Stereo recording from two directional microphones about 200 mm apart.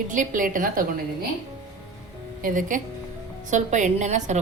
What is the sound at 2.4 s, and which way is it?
Speech, 40° right (ahead or behind).